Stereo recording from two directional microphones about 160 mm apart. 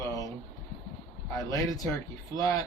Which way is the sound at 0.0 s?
20° left (ahead or behind).